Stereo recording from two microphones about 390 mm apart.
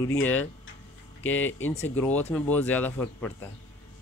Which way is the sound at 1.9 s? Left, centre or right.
Centre.